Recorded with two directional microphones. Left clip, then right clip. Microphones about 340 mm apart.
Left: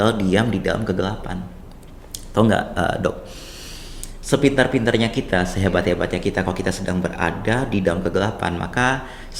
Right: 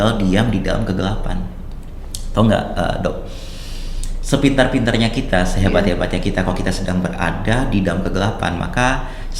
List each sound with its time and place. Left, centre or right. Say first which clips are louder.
0.0 s speech: right 1 dB; left
4.3 s speech: right 2 dB; left